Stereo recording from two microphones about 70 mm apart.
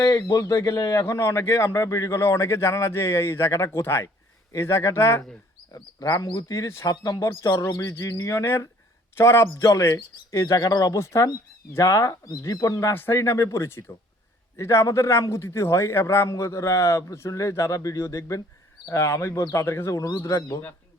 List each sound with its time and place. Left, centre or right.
0.0 s a man's voice: left
1.5 s a man's voice: left
1.7 s a man's voice: left
5.7 s speech: left
6.2 s speech: left
7.2 s a man's voice: left
10.6 s speech: left
10.9 s a man's voice: left
12.9 s a man's voice: left